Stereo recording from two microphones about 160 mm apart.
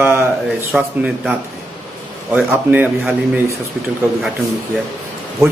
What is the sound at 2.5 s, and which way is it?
Speech, 10° right (ahead or behind).